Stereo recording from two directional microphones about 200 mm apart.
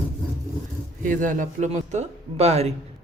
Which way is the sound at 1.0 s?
40° right (ahead or behind).